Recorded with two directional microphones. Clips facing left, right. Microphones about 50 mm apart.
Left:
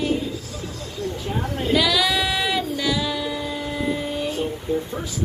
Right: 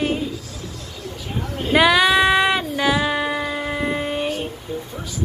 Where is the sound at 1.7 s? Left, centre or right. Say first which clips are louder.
Right 6 dB; right.